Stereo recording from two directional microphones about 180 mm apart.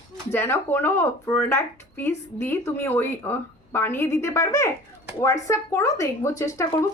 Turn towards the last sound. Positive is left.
turn(degrees=15)  # may be behind; listen again after turning